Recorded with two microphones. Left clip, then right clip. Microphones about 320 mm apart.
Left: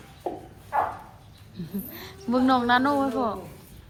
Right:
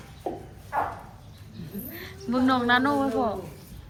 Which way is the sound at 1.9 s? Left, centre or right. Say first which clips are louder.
Left 3 dB; centre.